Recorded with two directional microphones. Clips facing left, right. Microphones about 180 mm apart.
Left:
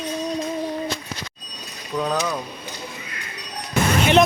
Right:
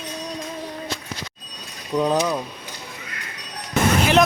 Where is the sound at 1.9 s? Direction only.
20° right (ahead or behind).